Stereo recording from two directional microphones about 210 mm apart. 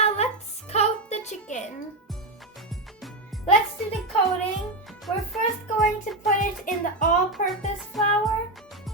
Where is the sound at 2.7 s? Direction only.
Centre (ahead or behind).